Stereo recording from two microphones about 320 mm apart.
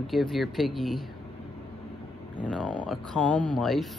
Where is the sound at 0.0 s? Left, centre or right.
Centre.